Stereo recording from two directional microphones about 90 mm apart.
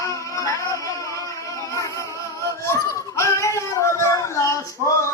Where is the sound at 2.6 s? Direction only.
35° left (ahead or behind).